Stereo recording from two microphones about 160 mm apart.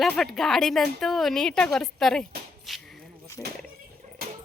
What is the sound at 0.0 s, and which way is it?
A woman's voice, centre (ahead or behind).